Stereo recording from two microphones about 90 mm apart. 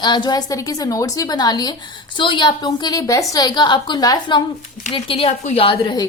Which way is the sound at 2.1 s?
60° left (ahead or behind).